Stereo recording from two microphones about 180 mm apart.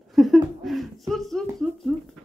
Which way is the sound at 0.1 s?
Centre (ahead or behind).